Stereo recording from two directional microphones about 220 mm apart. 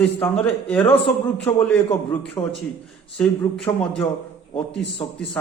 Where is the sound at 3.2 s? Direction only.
Centre (ahead or behind).